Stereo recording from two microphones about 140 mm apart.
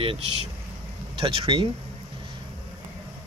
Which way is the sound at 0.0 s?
40° right (ahead or behind).